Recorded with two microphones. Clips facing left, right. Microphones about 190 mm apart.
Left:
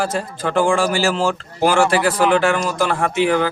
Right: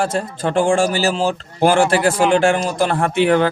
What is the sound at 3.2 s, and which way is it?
Speech, 55° right (ahead or behind).